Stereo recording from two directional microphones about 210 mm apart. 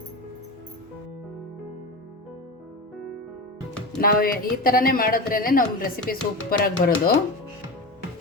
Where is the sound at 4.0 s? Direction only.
45° left (ahead or behind).